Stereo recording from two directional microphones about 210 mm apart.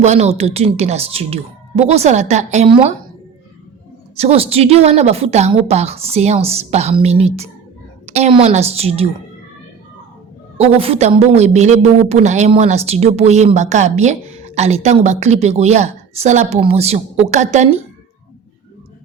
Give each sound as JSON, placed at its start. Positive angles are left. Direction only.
{"t": 0.0, "sound": "a woman's voice", "side_deg": -30}
{"t": 4.2, "sound": "a woman's voice", "side_deg": -30}
{"t": 10.8, "sound": "a woman's voice", "side_deg": -30}